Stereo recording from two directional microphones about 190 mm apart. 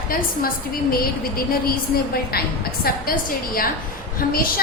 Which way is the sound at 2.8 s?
50° left (ahead or behind).